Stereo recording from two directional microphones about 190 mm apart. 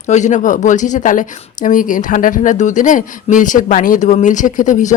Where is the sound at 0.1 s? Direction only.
40° left (ahead or behind).